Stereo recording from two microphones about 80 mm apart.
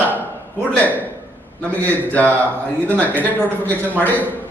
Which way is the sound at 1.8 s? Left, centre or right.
Centre.